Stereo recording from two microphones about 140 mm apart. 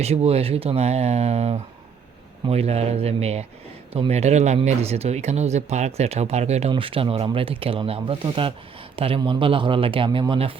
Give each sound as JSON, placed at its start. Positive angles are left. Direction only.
{"t": 0.0, "sound": "speech", "side_deg": -45}